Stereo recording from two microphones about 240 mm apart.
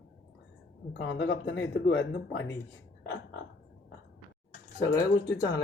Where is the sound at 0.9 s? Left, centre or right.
Left.